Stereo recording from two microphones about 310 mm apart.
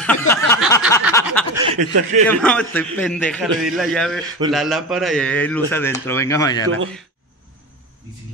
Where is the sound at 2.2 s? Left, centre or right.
Centre.